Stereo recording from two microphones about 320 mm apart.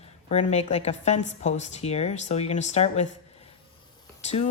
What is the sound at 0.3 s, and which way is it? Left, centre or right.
A woman's voice, left.